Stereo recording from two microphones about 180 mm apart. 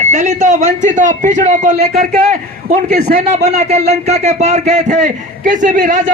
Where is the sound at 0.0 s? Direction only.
40° right (ahead or behind).